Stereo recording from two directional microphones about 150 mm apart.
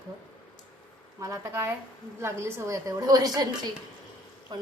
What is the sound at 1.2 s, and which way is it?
Speech, 15° right (ahead or behind).